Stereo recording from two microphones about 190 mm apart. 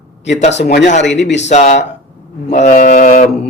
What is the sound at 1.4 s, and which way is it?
Speech, 35° left (ahead or behind).